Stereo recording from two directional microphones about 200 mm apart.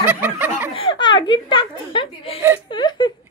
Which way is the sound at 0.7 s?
25° left (ahead or behind).